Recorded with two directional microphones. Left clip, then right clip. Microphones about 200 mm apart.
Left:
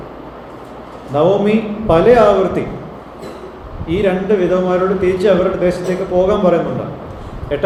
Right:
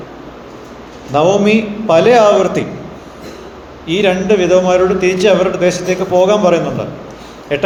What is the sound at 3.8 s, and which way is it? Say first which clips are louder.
A man's voice: right 3 dB; 20° right (ahead or behind).